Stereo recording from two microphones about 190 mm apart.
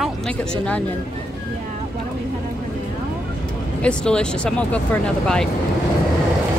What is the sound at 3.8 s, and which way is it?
Speech, 5° left (ahead or behind).